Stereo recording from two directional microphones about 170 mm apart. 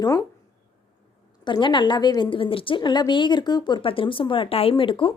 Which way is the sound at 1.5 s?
25° left (ahead or behind).